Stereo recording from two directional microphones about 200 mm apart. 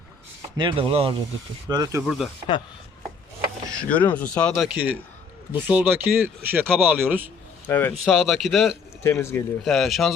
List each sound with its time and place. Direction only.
0.5 s speech: 25° right (ahead or behind)
1.7 s speech: 15° right (ahead or behind)
2.0 s speech: centre (ahead or behind)
3.7 s speech: 5° left (ahead or behind); by 7.3 s 10° right (ahead or behind)
7.7 s speech: 10° left (ahead or behind)
8.0 s speech: centre (ahead or behind)
9.0 s speech: 15° left (ahead or behind)
9.6 s speech: centre (ahead or behind)